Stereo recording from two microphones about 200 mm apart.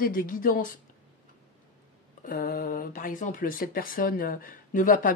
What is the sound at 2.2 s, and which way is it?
A woman's voice, 45° left (ahead or behind).